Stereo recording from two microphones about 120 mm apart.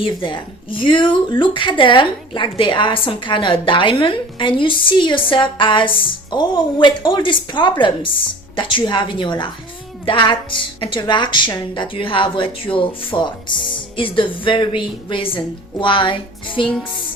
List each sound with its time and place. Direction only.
0.0 s a woman's voice: 45° left (ahead or behind)